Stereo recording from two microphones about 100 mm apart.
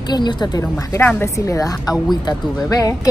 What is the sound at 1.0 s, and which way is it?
Speech, 30° left (ahead or behind).